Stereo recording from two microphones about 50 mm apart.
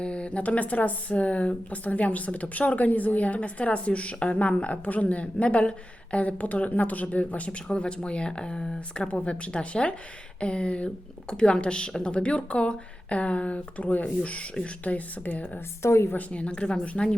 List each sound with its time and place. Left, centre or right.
0.0 s speech: left
15.8 s a woman's voice: left
16.1 s speech: left